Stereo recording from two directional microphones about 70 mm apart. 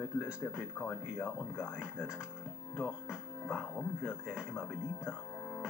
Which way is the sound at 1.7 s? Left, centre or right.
Centre.